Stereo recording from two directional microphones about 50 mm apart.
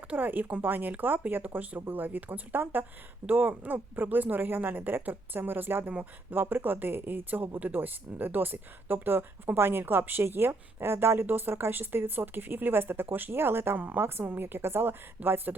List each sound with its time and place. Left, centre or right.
0.1 s a woman's voice: right
13.7 s a woman's voice: right